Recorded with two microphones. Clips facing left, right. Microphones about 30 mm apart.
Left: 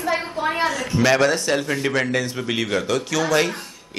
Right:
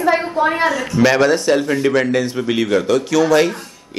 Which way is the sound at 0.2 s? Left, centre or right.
Centre.